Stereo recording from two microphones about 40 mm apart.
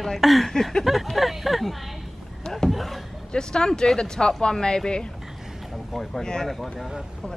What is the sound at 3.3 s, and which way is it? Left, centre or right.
Speech, centre.